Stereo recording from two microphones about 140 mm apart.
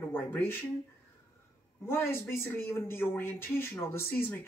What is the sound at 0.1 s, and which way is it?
Speech, 15° left (ahead or behind).